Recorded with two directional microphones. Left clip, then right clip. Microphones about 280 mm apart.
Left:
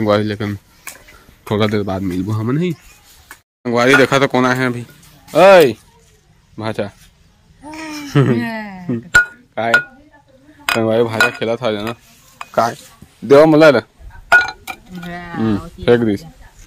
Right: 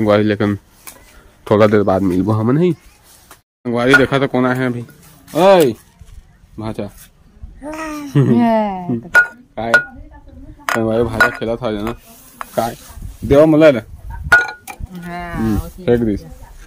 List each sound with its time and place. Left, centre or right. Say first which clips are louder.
0.0 s speech: right 2 dB; centre
7.6 s babbling: right 3 dB; centre
8.4 s speech: right 9 dB; right
8.9 s telephone dialing: even; centre
10.7 s speech: left 2 dB; centre
13.3 s speech: left 2 dB; centre
14.9 s speech: right 2 dB; centre